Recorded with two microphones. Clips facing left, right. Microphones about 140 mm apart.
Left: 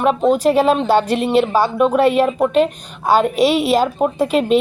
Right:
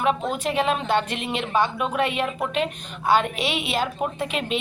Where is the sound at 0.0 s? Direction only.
40° left (ahead or behind).